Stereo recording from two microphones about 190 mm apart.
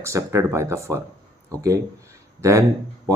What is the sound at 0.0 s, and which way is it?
Speech, 15° right (ahead or behind).